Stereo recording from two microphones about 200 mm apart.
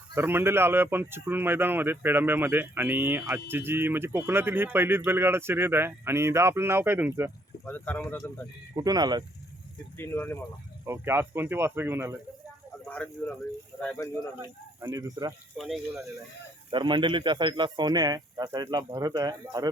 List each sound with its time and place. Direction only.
0.1 s speech: 10° right (ahead or behind)
7.6 s speech: 10° left (ahead or behind)
8.7 s a man's voice: 20° right (ahead or behind)
10.0 s speech: 10° left (ahead or behind)
10.8 s speech: 10° right (ahead or behind)
12.9 s speech: 5° left (ahead or behind)
14.8 s speech: 15° right (ahead or behind)
15.5 s speech: centre (ahead or behind)
16.7 s a man's voice: 25° right (ahead or behind)